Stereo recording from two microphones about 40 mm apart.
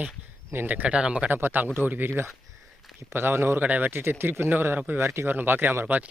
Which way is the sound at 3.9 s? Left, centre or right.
Right.